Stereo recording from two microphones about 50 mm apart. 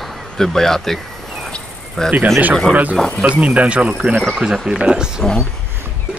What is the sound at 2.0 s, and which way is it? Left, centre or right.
Speech, centre.